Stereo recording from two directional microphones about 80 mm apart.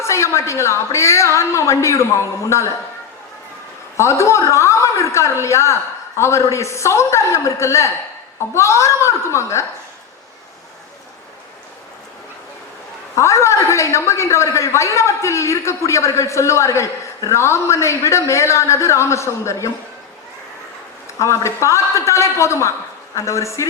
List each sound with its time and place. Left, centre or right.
0.0 s a woman's voice: left
3.9 s a woman's voice: left
13.1 s a woman's voice: left
21.2 s a woman's voice: left